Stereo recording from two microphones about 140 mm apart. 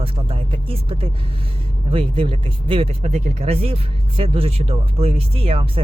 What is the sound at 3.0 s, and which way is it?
Speech, 50° right (ahead or behind).